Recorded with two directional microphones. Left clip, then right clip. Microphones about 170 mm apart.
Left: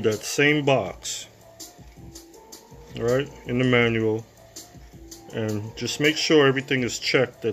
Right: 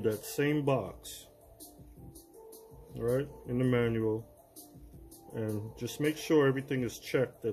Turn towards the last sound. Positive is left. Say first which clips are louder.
# left 10 dB
turn(degrees=0)  # may be behind; listen again after turning